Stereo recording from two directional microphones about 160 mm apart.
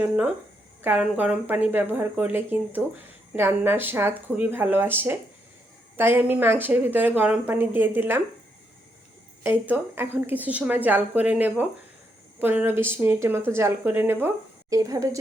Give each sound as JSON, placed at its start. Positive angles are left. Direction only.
{"t": 0.8, "sound": "speech", "side_deg": -10}
{"t": 9.4, "sound": "speech", "side_deg": -10}